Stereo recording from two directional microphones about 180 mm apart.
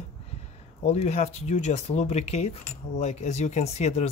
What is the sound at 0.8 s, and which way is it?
Speech, 35° left (ahead or behind).